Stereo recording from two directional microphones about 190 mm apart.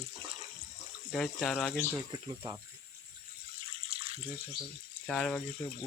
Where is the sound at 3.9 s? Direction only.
30° right (ahead or behind).